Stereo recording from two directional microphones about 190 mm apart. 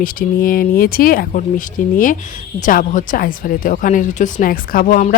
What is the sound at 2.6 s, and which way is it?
Speech, 45° left (ahead or behind).